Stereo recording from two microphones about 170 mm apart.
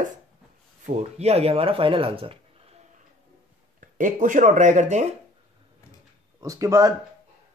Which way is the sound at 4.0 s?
50° right (ahead or behind).